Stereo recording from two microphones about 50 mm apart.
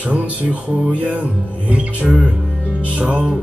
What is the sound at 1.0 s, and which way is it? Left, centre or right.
Music, right.